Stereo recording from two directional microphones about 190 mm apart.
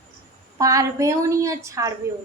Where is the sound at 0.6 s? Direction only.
15° right (ahead or behind).